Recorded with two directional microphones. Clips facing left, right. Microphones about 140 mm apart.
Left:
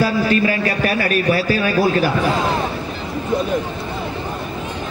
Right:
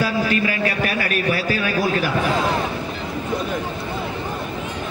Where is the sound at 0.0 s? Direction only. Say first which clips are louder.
Left 4 dB; 35° left (ahead or behind).